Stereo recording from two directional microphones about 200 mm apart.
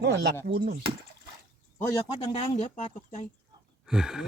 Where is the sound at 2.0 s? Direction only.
25° left (ahead or behind).